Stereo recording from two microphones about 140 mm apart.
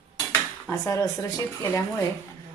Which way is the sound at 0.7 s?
20° left (ahead or behind).